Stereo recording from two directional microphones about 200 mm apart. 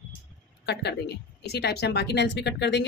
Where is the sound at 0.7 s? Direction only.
55° left (ahead or behind).